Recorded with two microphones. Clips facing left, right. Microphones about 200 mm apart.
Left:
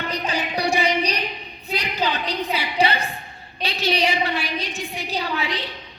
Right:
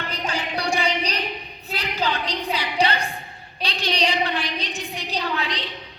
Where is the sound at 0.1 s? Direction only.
10° left (ahead or behind).